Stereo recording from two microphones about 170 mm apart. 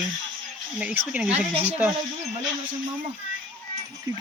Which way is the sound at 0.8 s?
5° right (ahead or behind).